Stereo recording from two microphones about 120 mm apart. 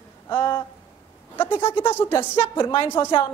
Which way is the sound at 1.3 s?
15° left (ahead or behind).